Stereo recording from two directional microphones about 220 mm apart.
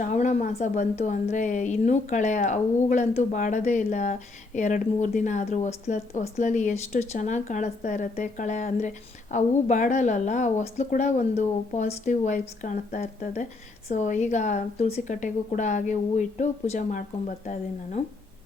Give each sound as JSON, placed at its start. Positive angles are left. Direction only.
{"t": 0.0, "sound": "a woman's voice", "side_deg": 35}